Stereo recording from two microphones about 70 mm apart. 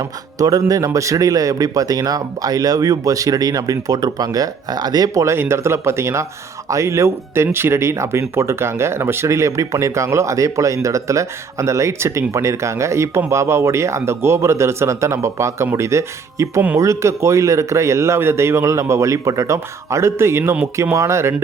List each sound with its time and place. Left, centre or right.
0.0 s speech: right
0.9 s speech: right